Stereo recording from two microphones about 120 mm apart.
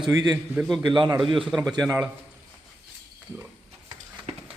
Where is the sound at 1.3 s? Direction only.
Centre (ahead or behind).